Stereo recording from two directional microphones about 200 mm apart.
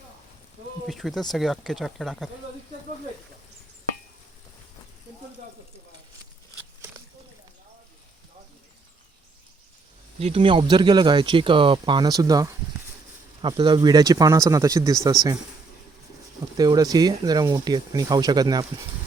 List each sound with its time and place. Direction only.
0.9 s speech: centre (ahead or behind)
10.2 s speech: 30° right (ahead or behind)
16.6 s speech: 20° right (ahead or behind)